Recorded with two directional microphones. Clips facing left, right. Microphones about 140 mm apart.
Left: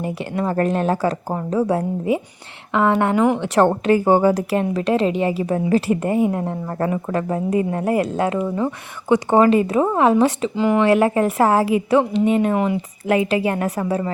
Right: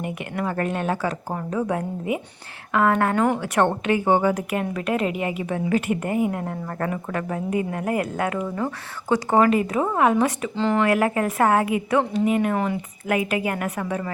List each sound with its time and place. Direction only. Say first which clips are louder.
0.0 s speech: left 4 dB; 30° left (ahead or behind)
1.3 s a woman's voice: left 4 dB; 20° left (ahead or behind)
1.5 s a woman's voice: left 6 dB; 30° left (ahead or behind)
3.4 s a woman's voice: left 5 dB; 30° left (ahead or behind)
8.4 s a woman's voice: left 5 dB; 15° left (ahead or behind)
10.5 s speech: left 4 dB; 10° left (ahead or behind)
10.8 s a woman's voice: left 5 dB; 25° left (ahead or behind)